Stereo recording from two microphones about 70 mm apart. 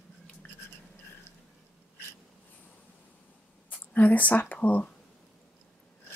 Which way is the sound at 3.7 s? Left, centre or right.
Left.